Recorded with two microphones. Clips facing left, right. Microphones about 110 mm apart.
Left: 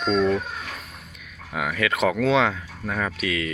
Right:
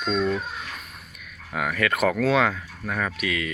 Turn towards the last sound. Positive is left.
turn(degrees=25)  # may be behind; listen again after turning